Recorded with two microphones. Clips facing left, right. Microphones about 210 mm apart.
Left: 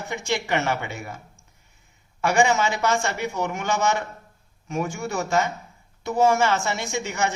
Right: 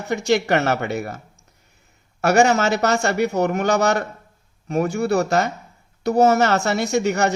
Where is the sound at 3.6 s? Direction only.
40° right (ahead or behind).